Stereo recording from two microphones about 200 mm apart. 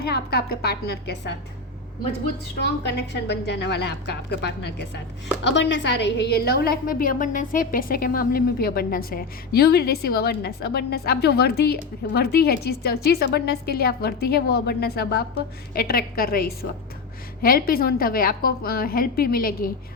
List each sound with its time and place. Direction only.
0.0 s a woman's voice: 55° left (ahead or behind)
2.6 s a woman's voice: 55° left (ahead or behind)